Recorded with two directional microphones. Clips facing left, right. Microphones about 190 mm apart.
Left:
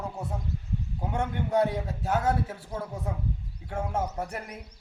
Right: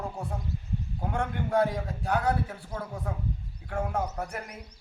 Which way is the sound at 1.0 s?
20° left (ahead or behind).